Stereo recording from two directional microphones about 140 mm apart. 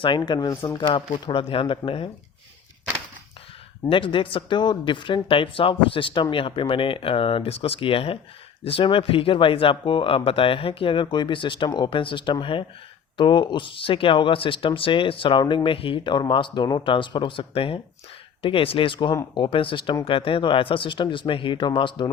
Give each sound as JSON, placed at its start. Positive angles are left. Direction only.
{"t": 0.2, "sound": "speech", "side_deg": 25}
{"t": 3.8, "sound": "speech", "side_deg": 40}